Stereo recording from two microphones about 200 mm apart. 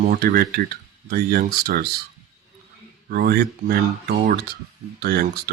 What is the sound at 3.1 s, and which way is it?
Speech, 50° right (ahead or behind).